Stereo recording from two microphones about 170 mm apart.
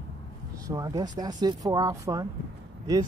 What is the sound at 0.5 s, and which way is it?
Speech, 20° right (ahead or behind).